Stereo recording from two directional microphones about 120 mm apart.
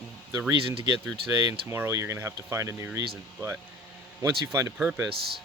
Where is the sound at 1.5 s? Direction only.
20° right (ahead or behind).